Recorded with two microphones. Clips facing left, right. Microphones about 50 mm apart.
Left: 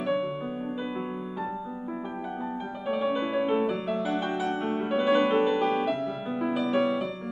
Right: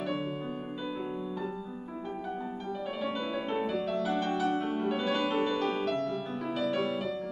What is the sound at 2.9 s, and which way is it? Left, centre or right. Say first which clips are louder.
Music: left 9 dB; centre.